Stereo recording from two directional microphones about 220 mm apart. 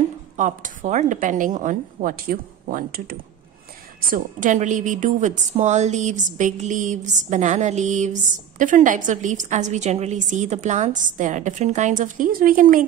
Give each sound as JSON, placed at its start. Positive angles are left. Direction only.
{"t": 0.4, "sound": "a woman's voice", "side_deg": -35}